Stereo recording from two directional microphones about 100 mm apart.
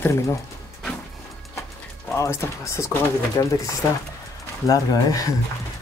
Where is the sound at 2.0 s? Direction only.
25° left (ahead or behind).